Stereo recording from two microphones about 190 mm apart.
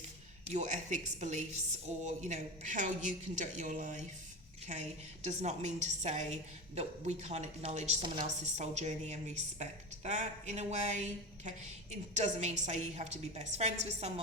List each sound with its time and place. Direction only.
0.4 s a woman's voice: 40° right (ahead or behind)